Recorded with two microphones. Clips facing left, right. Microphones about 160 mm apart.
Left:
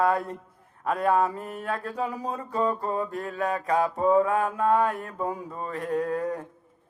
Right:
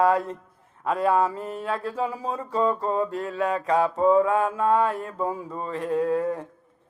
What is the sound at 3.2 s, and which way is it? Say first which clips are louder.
Mantra: right 3 dB; 40° left (ahead or behind).